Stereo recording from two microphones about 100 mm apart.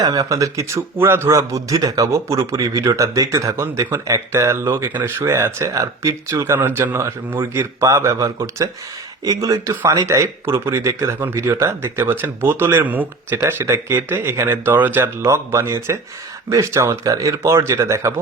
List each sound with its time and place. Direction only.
0.0 s a man's voice: 35° right (ahead or behind)